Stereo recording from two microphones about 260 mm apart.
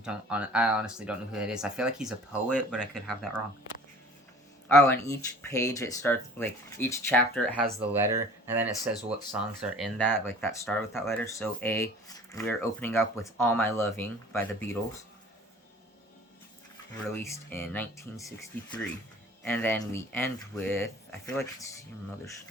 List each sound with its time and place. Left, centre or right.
0.0 s speech: centre
4.8 s speech: centre
7.8 s speech: centre
17.2 s speech: centre